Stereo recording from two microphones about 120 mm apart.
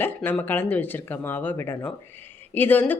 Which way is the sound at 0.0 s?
15° left (ahead or behind).